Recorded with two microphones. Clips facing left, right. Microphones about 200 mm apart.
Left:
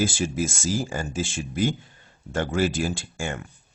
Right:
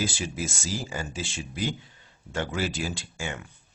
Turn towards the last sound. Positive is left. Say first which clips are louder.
# left 4 dB
turn(degrees=50)  # may be behind; listen again after turning